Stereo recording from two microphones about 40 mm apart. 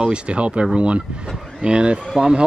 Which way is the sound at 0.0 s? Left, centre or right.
Right.